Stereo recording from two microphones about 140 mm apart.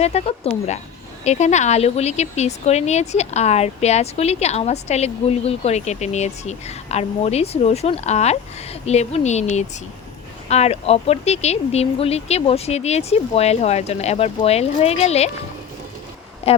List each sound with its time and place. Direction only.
0.0 s speech: 45° left (ahead or behind)
16.4 s speech: 45° left (ahead or behind)